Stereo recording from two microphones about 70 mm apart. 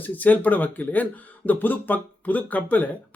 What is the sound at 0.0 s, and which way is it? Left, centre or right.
Speech, left.